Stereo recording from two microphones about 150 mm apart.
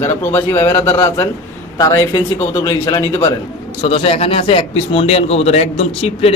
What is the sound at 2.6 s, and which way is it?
Speech, 20° left (ahead or behind).